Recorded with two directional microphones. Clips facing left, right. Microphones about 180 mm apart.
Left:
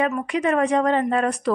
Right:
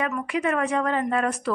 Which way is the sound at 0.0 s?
30° left (ahead or behind).